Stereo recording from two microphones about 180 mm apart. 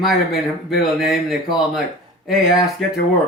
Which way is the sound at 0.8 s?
Centre (ahead or behind).